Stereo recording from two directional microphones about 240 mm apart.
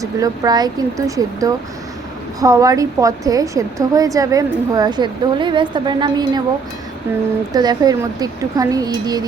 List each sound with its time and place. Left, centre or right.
0.0 s a woman's voice: centre
7.5 s a woman's voice: centre